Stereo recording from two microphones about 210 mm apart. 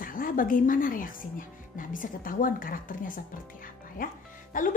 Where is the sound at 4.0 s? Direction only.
40° left (ahead or behind).